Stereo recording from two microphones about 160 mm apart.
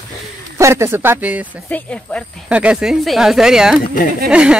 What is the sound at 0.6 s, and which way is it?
Speech, 15° right (ahead or behind).